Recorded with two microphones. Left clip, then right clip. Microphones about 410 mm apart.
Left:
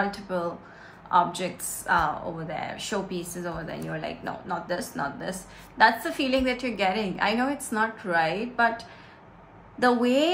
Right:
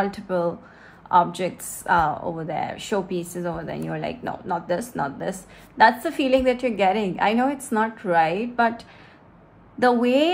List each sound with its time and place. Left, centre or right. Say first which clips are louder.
0.0 s a woman's voice: right 4 dB; centre
9.8 s a woman's voice: right 3 dB; centre